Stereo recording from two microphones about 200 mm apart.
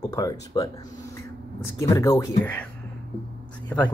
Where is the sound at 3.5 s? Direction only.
5° left (ahead or behind).